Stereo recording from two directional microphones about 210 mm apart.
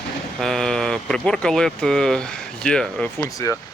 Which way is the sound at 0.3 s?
Centre (ahead or behind).